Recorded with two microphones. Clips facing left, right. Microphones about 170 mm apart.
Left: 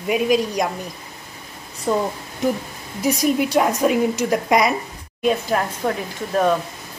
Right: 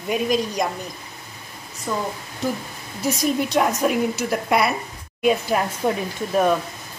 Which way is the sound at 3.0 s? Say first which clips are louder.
Left 3 dB; 10° left (ahead or behind).